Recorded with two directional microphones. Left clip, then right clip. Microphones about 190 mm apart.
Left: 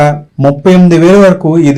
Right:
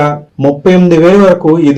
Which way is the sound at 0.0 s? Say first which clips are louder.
Left 2 dB; 40° left (ahead or behind).